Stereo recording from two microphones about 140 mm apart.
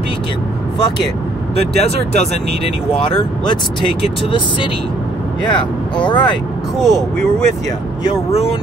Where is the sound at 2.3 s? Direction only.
40° left (ahead or behind).